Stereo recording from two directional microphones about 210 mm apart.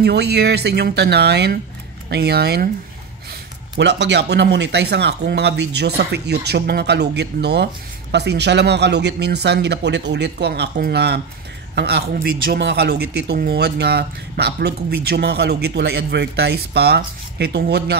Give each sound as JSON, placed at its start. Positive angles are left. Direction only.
{"t": 0.0, "sound": "speech", "side_deg": -50}
{"t": 3.7, "sound": "speech", "side_deg": -55}